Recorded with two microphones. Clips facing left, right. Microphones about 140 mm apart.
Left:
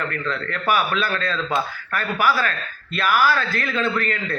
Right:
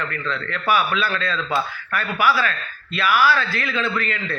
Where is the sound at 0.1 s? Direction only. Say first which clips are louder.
Left 1 dB; 45° left (ahead or behind).